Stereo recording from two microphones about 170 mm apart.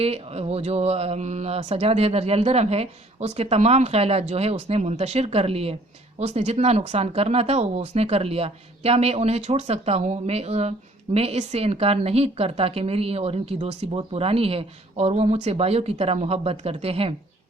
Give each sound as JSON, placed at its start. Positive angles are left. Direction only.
{"t": 0.0, "sound": "speech", "side_deg": -35}